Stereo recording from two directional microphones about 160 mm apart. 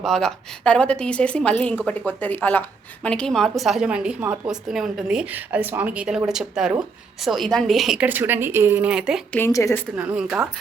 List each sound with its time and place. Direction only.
0.0 s a woman's voice: centre (ahead or behind)
9.3 s a woman's voice: 15° left (ahead or behind)
9.9 s a woman's voice: 10° right (ahead or behind)